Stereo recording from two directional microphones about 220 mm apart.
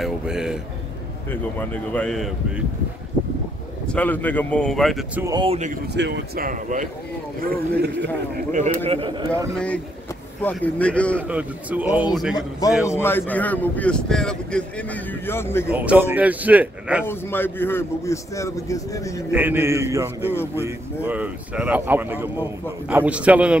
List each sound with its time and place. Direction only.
0.0 s speech: centre (ahead or behind)
3.9 s speech: 5° left (ahead or behind)
5.2 s speech: 20° right (ahead or behind)
5.9 s speech: 50° right (ahead or behind)
8.5 s speech: 35° right (ahead or behind)
10.4 s speech: 5° left (ahead or behind)
11.2 s speech: 5° right (ahead or behind)
12.8 s a man's voice: 10° left (ahead or behind)
15.7 s speech: 5° right (ahead or behind)
17.0 s a man's voice: 10° left (ahead or behind)
19.3 s speech: 10° right (ahead or behind)